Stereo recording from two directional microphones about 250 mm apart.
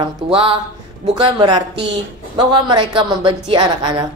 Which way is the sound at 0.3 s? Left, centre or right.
Right.